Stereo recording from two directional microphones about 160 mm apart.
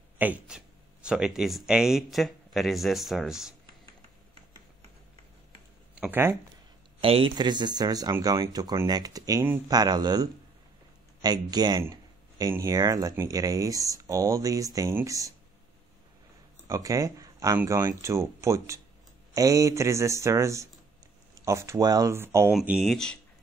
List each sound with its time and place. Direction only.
0.2 s speech: 5° right (ahead or behind)
5.9 s speech: 10° right (ahead or behind)
7.0 s speech: 35° right (ahead or behind)
16.6 s speech: 20° right (ahead or behind)
22.5 s speech: 5° right (ahead or behind)